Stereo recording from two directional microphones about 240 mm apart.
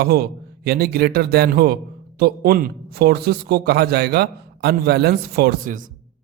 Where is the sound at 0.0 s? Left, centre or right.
Right.